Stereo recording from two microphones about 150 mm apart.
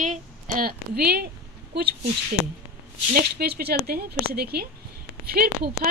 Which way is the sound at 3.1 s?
90° right.